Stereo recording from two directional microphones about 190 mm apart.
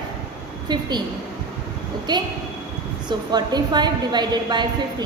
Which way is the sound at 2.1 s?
25° right (ahead or behind).